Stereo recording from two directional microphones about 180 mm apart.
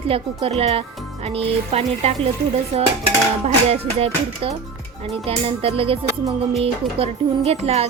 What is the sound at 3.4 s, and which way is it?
Speech, 35° right (ahead or behind).